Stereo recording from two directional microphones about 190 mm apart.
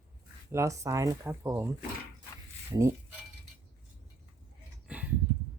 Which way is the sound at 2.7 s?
15° right (ahead or behind).